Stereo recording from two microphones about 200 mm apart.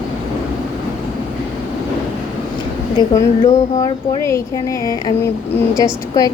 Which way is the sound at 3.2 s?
20° left (ahead or behind).